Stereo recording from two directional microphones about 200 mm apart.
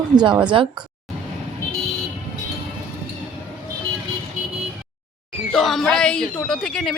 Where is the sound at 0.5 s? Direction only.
25° right (ahead or behind).